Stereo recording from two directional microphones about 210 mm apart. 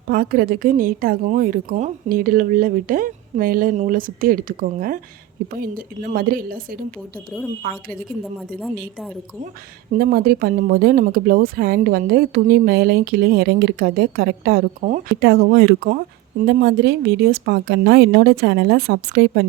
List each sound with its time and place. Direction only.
0.1 s speech: 45° right (ahead or behind)
8.4 s a woman's voice: centre (ahead or behind)
9.9 s speech: 45° right (ahead or behind)
15.2 s speech: 50° right (ahead or behind)